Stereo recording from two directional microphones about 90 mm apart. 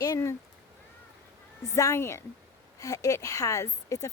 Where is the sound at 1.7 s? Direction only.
35° left (ahead or behind).